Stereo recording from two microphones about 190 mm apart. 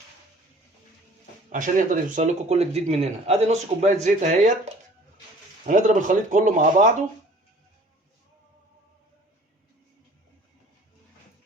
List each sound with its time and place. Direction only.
1.5 s speech: 40° right (ahead or behind)
5.6 s speech: 40° right (ahead or behind)